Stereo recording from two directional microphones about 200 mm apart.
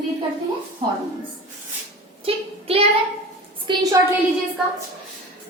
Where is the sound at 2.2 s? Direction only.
30° right (ahead or behind).